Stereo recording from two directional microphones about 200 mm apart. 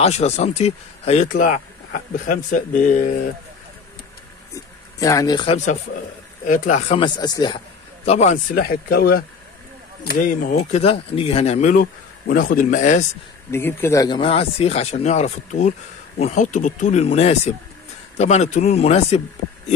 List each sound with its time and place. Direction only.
0.0 s speech: 35° left (ahead or behind)
4.9 s speech: 15° left (ahead or behind)
6.4 s speech: 40° left (ahead or behind)
7.0 s a man's voice: 20° left (ahead or behind)
8.5 s speech: 50° left (ahead or behind)
13.5 s speech: 10° left (ahead or behind); by 19.2 s 35° left (ahead or behind)